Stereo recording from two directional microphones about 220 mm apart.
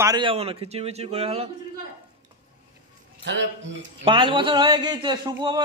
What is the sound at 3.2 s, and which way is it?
Speech, 55° right (ahead or behind).